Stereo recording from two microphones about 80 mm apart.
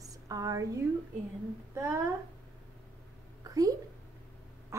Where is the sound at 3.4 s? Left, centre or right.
Right.